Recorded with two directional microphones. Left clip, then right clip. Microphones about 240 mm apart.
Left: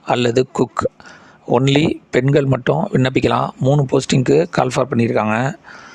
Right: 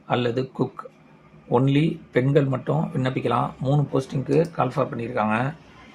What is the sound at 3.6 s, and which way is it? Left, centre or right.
Speech, left.